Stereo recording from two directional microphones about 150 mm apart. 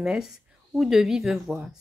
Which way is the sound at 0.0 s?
5° right (ahead or behind).